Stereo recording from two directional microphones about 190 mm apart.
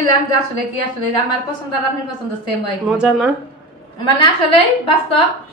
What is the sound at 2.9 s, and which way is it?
Speech, 5° right (ahead or behind).